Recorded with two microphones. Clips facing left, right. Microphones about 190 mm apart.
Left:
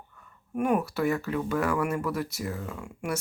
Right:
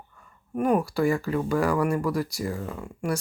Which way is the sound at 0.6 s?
5° left (ahead or behind).